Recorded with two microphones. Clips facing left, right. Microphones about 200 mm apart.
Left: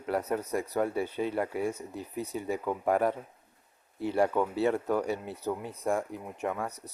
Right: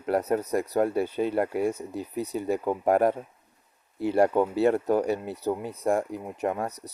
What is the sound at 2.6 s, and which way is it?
Speech, 35° right (ahead or behind).